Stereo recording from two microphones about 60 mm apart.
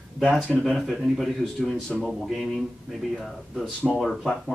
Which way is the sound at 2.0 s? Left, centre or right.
Centre.